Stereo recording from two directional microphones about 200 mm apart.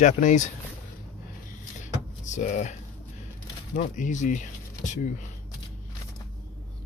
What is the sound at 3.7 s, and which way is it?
Speech, 40° left (ahead or behind).